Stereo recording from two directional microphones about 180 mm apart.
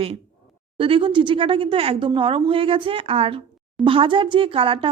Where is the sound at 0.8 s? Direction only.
30° right (ahead or behind).